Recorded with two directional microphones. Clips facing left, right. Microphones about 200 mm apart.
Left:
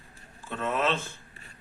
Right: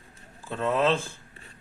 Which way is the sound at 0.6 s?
30° right (ahead or behind).